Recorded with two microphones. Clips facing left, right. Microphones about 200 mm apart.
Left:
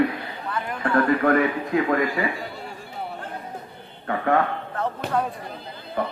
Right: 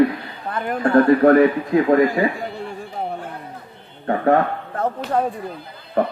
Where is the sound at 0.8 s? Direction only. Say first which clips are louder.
Right 7 dB; 35° right (ahead or behind).